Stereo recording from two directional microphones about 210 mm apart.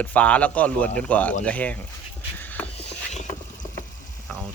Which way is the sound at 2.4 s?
10° left (ahead or behind).